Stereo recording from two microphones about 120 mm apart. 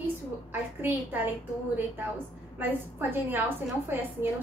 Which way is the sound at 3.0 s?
15° right (ahead or behind).